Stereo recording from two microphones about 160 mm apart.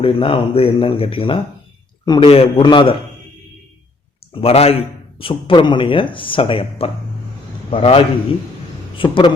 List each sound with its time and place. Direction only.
0.0 s a man's voice: 35° left (ahead or behind)
4.4 s a man's voice: 40° left (ahead or behind)